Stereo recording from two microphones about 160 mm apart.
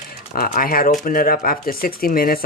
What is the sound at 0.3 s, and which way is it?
Speech, 65° left (ahead or behind).